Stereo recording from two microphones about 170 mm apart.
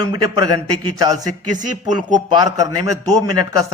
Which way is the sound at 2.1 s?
20° right (ahead or behind).